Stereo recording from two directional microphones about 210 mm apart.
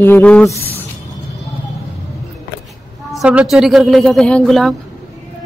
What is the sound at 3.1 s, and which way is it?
Speech, 5° right (ahead or behind).